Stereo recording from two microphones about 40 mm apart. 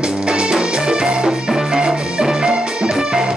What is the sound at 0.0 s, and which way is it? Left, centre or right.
Music, right.